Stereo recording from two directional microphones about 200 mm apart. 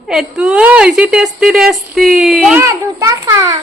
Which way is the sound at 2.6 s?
15° right (ahead or behind).